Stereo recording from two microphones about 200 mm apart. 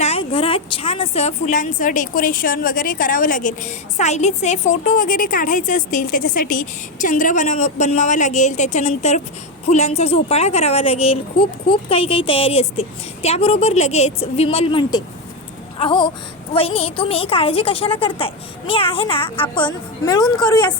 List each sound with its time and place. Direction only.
0.0 s a woman's voice: 30° left (ahead or behind)